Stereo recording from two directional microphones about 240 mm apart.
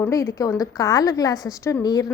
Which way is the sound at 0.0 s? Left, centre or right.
Centre.